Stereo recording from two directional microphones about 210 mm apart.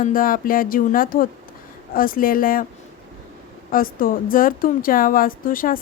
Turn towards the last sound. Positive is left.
turn(degrees=40)  # may be behind; listen again after turning